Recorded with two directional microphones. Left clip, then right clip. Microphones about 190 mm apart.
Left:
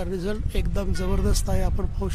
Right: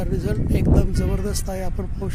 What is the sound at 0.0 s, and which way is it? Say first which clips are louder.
Speech: right 2 dB; centre (ahead or behind).